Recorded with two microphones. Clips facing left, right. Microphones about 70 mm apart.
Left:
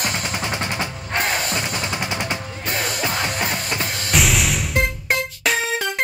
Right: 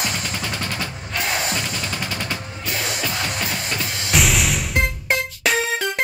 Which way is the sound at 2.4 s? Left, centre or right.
Left.